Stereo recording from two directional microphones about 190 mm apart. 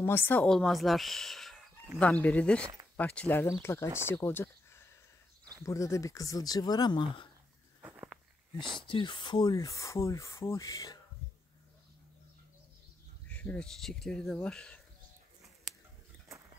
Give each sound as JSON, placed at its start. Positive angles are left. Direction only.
{"t": 0.0, "sound": "speech", "side_deg": 10}
{"t": 7.8, "sound": "walk", "side_deg": -10}
{"t": 8.8, "sound": "speech", "side_deg": 25}
{"t": 13.3, "sound": "speech", "side_deg": 10}